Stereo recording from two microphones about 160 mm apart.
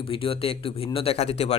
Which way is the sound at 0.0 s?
35° left (ahead or behind).